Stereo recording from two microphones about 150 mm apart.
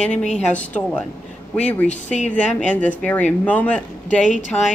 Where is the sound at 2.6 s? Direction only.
10° left (ahead or behind).